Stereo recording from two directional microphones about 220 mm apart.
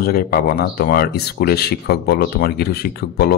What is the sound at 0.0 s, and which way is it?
Speech, 45° left (ahead or behind).